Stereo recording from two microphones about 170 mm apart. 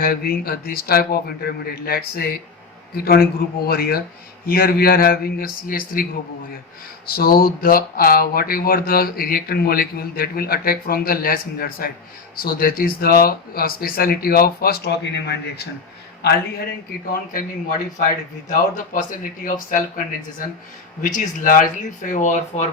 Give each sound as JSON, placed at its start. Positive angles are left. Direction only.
{"t": 0.0, "sound": "speech", "side_deg": 60}
{"t": 7.1, "sound": "a man's voice", "side_deg": 60}
{"t": 17.1, "sound": "speech", "side_deg": 55}
{"t": 21.0, "sound": "speech", "side_deg": 50}